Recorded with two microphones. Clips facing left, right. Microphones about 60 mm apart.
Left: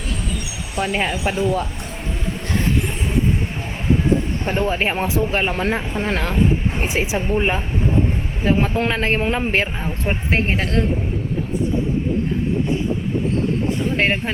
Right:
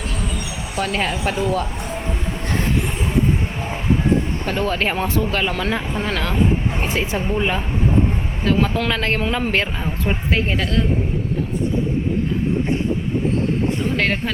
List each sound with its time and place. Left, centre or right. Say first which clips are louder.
0.8 s a woman's voice: left 1 dB; centre
4.4 s a woman's voice: left 2 dB; centre
5.3 s speech: left 1 dB; left
6.7 s speech: left 1 dB; centre
7.3 s speech: left 1 dB; left
13.9 s speech: left 3 dB; left